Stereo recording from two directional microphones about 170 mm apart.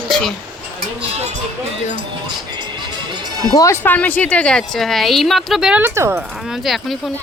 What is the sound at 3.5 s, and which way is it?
A woman's voice, 20° left (ahead or behind).